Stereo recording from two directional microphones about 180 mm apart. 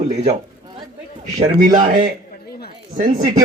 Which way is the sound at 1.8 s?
40° right (ahead or behind).